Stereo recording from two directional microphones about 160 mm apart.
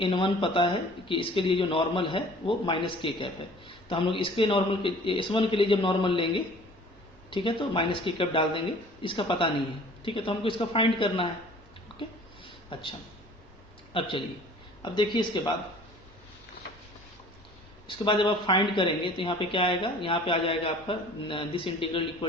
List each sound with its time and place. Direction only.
0.0 s speech: 30° left (ahead or behind)
12.7 s speech: 35° left (ahead or behind)
13.9 s speech: 35° left (ahead or behind)
17.8 s speech: 30° left (ahead or behind)